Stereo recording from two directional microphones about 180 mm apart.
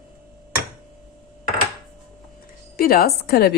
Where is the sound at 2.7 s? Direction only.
55° left (ahead or behind).